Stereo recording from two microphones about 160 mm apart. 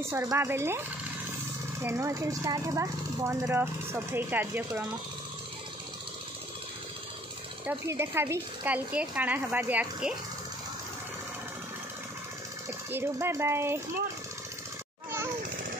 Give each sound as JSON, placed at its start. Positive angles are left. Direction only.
{"t": 0.1, "sound": "speech", "side_deg": -15}
{"t": 7.6, "sound": "speech", "side_deg": -15}
{"t": 12.9, "sound": "speech", "side_deg": -15}